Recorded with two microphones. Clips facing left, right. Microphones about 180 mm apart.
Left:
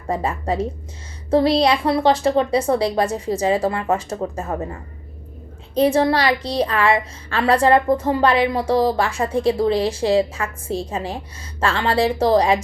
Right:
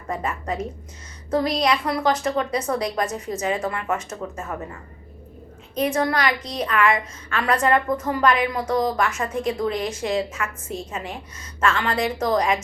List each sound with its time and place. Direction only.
0.1 s a woman's voice: 30° left (ahead or behind)